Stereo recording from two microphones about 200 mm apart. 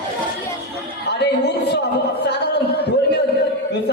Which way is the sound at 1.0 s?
60° left (ahead or behind).